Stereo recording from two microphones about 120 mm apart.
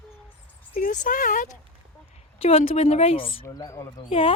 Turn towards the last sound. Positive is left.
turn(degrees=50)  # may be behind; listen again after turning